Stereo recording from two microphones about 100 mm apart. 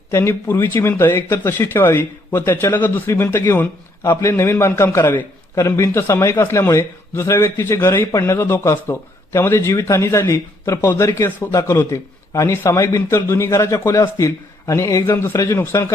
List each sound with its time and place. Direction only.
0.1 s a man's voice: 30° left (ahead or behind)